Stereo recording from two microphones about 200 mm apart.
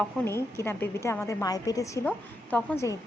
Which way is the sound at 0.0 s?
10° left (ahead or behind).